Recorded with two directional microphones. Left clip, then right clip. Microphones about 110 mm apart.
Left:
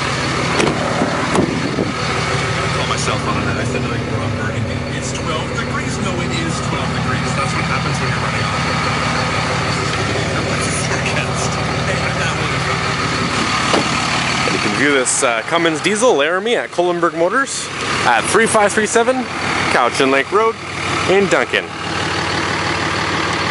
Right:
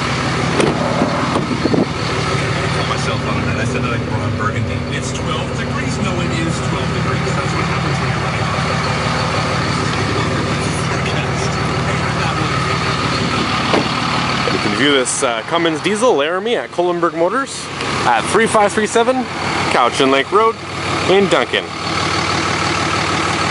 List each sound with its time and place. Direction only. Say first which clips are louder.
13.7 s vehicle: even; 25° left (ahead or behind)
14.8 s speech: even; 5° left (ahead or behind)